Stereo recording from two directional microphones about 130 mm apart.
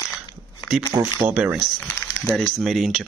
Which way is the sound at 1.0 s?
15° right (ahead or behind).